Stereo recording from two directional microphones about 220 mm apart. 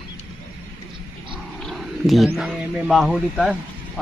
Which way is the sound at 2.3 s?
Centre (ahead or behind).